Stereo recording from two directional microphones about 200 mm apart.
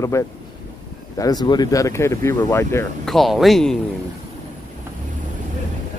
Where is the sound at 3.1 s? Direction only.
Centre (ahead or behind).